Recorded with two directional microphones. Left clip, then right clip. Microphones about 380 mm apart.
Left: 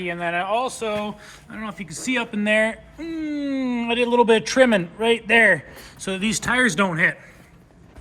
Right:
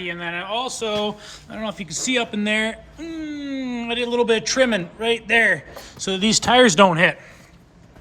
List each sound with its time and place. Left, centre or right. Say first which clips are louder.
0.0 s speech: left 3 dB; centre